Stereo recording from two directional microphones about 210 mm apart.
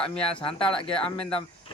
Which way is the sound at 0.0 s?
5° left (ahead or behind).